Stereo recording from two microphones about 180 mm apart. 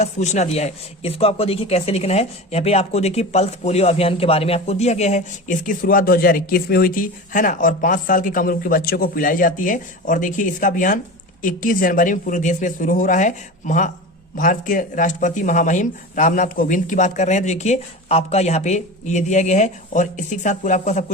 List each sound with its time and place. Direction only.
0.0 s speech: 40° left (ahead or behind)